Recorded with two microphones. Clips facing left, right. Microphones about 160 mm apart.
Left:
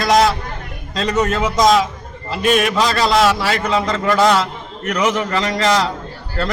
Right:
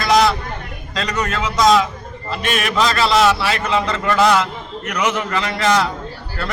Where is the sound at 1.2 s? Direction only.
35° left (ahead or behind).